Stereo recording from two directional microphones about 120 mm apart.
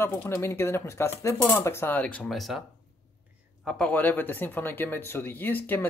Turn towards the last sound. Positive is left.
turn(degrees=15)  # may be behind; listen again after turning